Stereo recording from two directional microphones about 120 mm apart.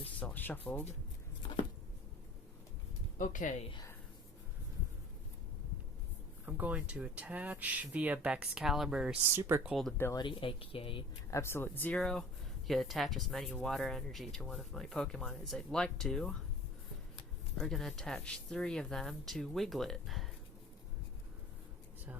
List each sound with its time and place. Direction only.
0.2 s speech: 15° left (ahead or behind)
3.2 s speech: 90° left
6.4 s speech: 15° right (ahead or behind)
9.3 s speech: 20° right (ahead or behind)
10.2 s speech: 45° left (ahead or behind)
11.3 s speech: 25° left (ahead or behind); by 16.3 s 5° left (ahead or behind)
17.6 s speech: 5° left (ahead or behind)